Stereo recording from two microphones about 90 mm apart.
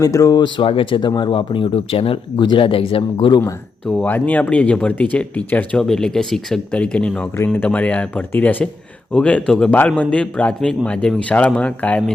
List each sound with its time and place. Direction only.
0.0 s speech: 40° left (ahead or behind)
0.4 s speech: 70° left (ahead or behind); by 3.3 s 85° left
3.8 s speech: 15° left (ahead or behind)
5.8 s speech: 5° left (ahead or behind)